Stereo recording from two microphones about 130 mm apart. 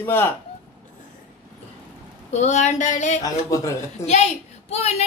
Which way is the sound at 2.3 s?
60° left (ahead or behind).